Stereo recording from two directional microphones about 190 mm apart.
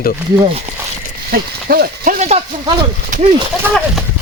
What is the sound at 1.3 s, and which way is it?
Speech, 50° right (ahead or behind).